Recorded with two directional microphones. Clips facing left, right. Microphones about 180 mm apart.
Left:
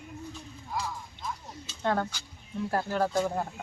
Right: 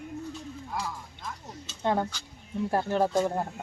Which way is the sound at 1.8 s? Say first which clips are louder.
Right 1 dB; 15° right (ahead or behind).